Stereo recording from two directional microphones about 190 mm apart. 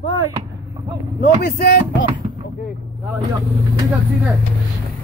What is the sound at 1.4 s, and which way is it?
Speech, 60° left (ahead or behind).